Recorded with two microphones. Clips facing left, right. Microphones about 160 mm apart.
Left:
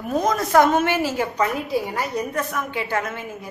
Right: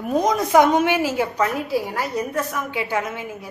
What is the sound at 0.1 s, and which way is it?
A woman's voice, 15° right (ahead or behind).